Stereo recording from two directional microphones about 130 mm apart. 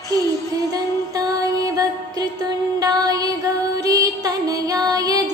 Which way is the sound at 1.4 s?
30° right (ahead or behind).